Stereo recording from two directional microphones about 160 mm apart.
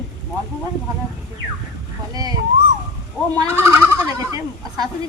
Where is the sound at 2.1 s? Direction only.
25° right (ahead or behind).